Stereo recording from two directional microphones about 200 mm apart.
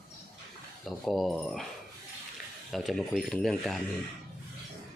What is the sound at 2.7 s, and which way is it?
Speech, centre (ahead or behind).